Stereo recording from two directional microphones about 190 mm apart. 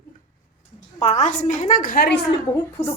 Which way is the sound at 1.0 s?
35° left (ahead or behind).